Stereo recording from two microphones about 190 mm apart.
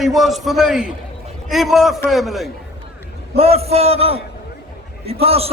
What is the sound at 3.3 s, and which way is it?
A man's voice, 30° right (ahead or behind).